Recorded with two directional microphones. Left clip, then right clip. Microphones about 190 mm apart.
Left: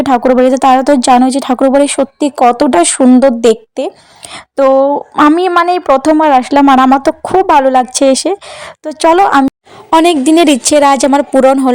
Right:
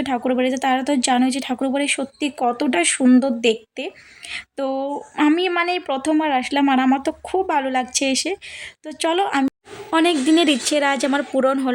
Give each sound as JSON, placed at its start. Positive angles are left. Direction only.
{"t": 0.0, "sound": "a woman's voice", "side_deg": 25}
{"t": 5.1, "sound": "speech", "side_deg": 15}
{"t": 5.4, "sound": "a woman's voice", "side_deg": 25}